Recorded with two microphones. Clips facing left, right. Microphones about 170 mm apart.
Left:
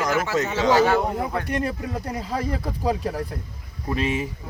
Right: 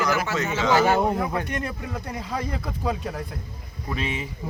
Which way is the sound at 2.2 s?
30° left (ahead or behind).